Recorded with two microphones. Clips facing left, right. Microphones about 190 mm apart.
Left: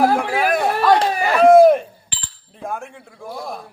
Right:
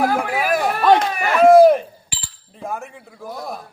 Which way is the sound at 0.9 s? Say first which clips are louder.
Left 2 dB; 30° left (ahead or behind).